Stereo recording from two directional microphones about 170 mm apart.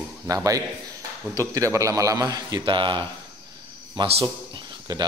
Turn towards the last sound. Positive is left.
turn(degrees=-25)  # may be behind; listen again after turning